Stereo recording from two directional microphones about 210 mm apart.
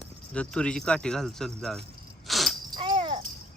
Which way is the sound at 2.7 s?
25° right (ahead or behind).